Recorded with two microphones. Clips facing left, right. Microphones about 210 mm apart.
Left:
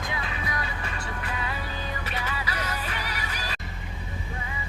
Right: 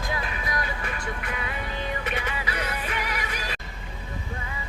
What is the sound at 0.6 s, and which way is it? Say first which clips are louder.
Music: right 3 dB; 35° left (ahead or behind).